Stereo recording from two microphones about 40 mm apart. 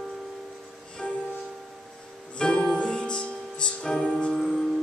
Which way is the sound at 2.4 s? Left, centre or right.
Centre.